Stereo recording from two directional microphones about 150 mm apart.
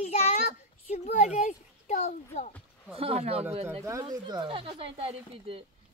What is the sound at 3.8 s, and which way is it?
Speech, 25° right (ahead or behind).